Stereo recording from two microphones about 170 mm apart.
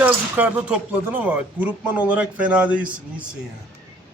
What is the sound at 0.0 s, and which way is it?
Speech, 10° right (ahead or behind).